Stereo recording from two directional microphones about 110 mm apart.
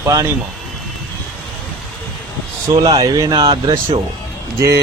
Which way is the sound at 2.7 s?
35° right (ahead or behind).